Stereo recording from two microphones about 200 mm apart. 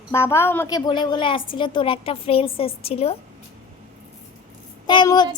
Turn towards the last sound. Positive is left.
turn(degrees=20)  # may be behind; listen again after turning